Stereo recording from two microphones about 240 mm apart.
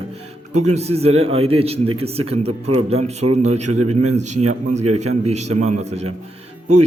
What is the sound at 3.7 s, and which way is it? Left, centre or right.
A man's voice, right.